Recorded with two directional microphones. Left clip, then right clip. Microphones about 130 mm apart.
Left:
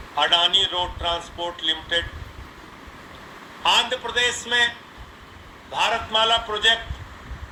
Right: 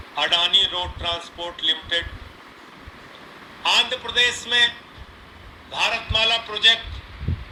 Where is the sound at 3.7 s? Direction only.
55° left (ahead or behind).